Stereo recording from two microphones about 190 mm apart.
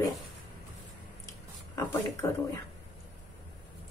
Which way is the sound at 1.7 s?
15° left (ahead or behind).